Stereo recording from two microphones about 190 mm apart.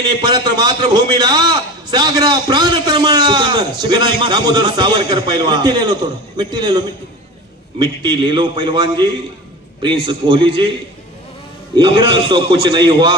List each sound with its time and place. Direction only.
0.2 s a man's voice: 20° right (ahead or behind)
11.8 s a man's voice: 25° right (ahead or behind)